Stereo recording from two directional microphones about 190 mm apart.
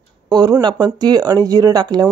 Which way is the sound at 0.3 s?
20° right (ahead or behind).